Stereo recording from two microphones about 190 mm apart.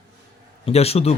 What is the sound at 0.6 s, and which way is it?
Speech, 30° left (ahead or behind).